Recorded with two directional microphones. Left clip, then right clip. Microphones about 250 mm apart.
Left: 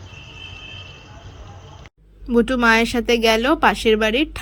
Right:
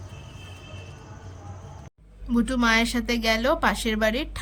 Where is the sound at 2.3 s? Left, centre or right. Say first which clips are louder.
Left 7 dB; centre.